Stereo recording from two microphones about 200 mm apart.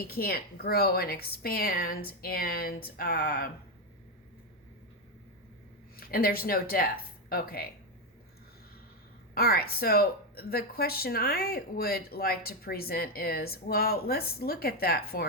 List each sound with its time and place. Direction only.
0.1 s speech: 50° left (ahead or behind)
6.0 s speech: 50° left (ahead or behind)
9.3 s speech: 50° left (ahead or behind)